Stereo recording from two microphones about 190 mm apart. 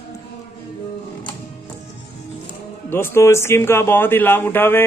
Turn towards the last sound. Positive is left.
turn(degrees=10)  # may be behind; listen again after turning